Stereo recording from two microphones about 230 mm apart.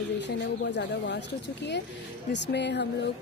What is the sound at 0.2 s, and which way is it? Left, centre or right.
Speech, left.